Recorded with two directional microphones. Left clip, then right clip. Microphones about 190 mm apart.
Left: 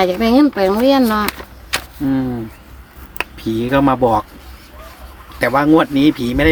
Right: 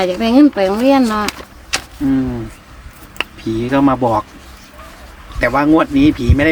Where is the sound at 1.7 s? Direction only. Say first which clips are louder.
Right 1 dB; 25° left (ahead or behind).